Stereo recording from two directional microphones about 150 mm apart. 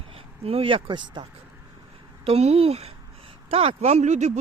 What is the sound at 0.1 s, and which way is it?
Speech, 40° right (ahead or behind).